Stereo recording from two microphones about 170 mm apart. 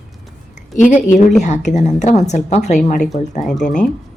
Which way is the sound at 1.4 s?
45° left (ahead or behind).